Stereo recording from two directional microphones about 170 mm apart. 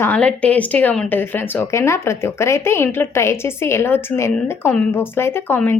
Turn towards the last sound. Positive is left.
turn(degrees=15)  # may be behind; listen again after turning